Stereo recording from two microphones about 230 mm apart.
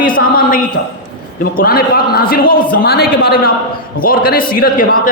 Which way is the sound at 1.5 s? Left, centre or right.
Left.